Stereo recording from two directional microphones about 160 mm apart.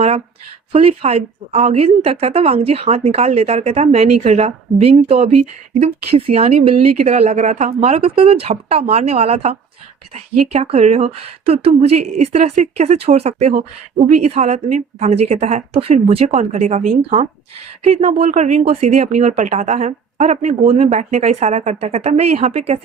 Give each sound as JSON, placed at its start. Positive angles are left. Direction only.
{"t": 0.7, "sound": "a woman's voice", "side_deg": -40}